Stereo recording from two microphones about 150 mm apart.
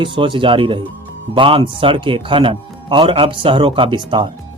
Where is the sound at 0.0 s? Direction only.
35° right (ahead or behind).